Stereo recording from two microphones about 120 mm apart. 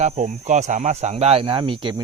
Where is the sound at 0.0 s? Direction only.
90° right.